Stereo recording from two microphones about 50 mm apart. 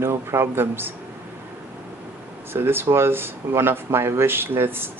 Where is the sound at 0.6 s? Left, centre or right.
Right.